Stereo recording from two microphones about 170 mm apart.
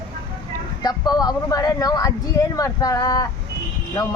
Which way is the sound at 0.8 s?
25° left (ahead or behind).